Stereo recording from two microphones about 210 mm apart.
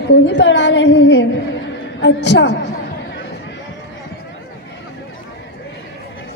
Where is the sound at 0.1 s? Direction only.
55° left (ahead or behind).